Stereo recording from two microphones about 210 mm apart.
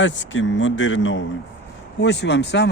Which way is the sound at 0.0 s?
60° left (ahead or behind).